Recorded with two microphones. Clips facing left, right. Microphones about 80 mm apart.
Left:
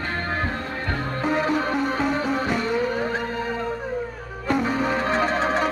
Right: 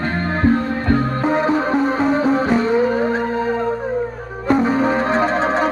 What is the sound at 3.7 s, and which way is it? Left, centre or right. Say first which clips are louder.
Music: right 7 dB; right.